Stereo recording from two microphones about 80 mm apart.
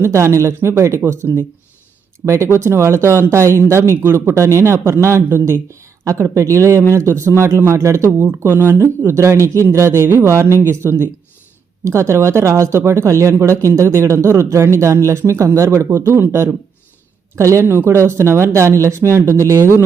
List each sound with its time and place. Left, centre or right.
0.0 s speech: right